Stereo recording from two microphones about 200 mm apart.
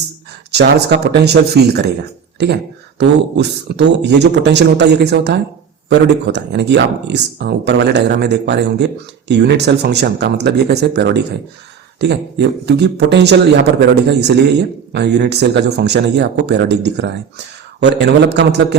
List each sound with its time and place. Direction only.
0.5 s speech: 55° right (ahead or behind)
3.0 s speech: 60° right (ahead or behind)